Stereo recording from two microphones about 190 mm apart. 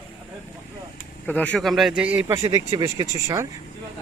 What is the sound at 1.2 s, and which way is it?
A man's voice, 10° left (ahead or behind).